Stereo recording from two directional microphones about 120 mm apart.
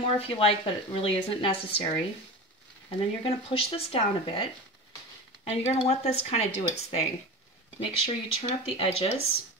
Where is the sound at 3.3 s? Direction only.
50° left (ahead or behind).